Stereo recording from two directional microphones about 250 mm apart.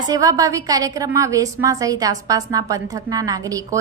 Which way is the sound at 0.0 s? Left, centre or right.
Centre.